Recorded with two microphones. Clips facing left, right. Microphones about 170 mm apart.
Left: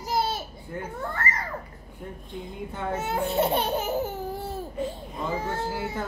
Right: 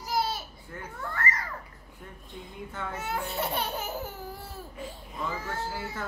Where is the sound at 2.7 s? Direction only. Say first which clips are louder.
Left 5 dB; 25° left (ahead or behind).